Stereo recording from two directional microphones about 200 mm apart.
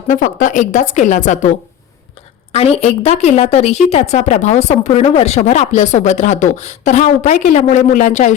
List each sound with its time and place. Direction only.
0.1 s speech: 40° left (ahead or behind)